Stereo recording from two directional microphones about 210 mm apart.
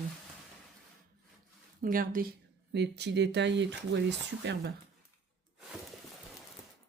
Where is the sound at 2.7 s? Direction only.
55° right (ahead or behind).